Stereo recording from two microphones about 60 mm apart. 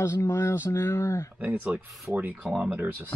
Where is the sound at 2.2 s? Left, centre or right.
Right.